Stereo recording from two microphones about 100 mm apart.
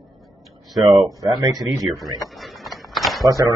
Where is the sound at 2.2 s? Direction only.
Centre (ahead or behind).